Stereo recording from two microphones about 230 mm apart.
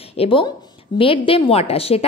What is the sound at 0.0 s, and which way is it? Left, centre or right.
A woman's voice, left.